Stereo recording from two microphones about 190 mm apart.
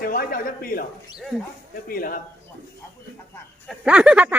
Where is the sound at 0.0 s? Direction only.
50° left (ahead or behind).